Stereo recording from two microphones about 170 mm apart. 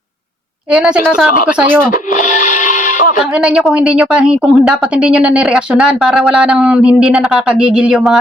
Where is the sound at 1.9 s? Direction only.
45° left (ahead or behind).